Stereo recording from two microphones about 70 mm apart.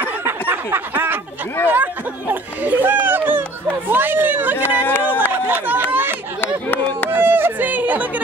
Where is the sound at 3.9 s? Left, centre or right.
Right.